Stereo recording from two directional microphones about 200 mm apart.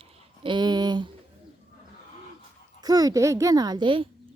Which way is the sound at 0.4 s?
20° right (ahead or behind).